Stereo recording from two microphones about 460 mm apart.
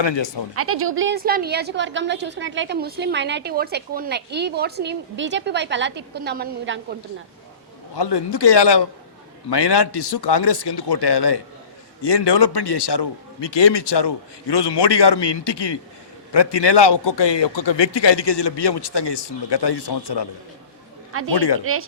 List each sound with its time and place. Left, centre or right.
0.0 s speech: left
0.5 s a woman's voice: right
7.9 s a man's voice: left
21.1 s a man's voice: right
21.3 s a man's voice: left
21.6 s a woman's voice: right